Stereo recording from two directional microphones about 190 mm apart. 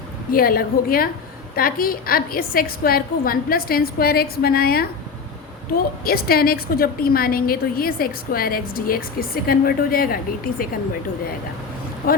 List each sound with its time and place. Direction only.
0.3 s a woman's voice: 50° left (ahead or behind)